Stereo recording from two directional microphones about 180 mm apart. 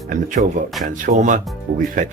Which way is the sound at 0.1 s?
45° right (ahead or behind).